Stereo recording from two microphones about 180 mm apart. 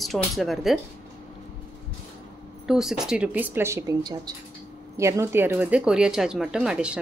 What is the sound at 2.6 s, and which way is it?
Speech, 5° right (ahead or behind).